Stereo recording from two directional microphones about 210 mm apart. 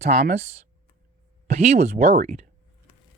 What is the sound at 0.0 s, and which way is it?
Speech, 30° right (ahead or behind).